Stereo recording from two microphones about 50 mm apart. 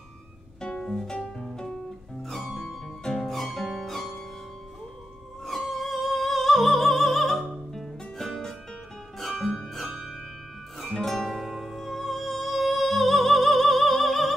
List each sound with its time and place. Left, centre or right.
0.6 s music: centre
3.0 s music: centre
5.5 s music: centre